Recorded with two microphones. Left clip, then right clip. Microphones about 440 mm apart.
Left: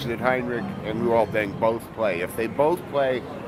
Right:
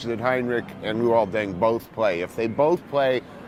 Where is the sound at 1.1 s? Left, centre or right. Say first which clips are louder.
Left 2 dB; right.